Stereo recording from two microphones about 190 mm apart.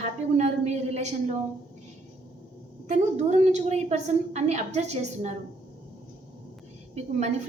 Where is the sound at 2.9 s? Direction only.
35° right (ahead or behind).